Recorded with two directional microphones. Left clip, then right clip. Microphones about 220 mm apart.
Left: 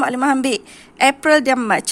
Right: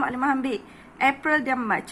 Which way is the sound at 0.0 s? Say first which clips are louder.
Left 7 dB; 65° left (ahead or behind).